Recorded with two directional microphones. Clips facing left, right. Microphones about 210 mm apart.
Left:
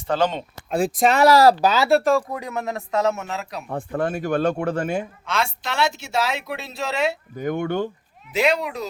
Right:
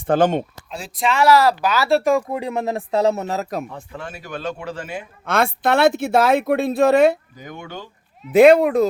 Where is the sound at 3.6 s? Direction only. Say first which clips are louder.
Left 9 dB; 50° left (ahead or behind).